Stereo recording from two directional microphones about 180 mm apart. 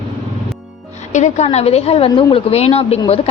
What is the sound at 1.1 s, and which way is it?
A woman's voice, 40° left (ahead or behind).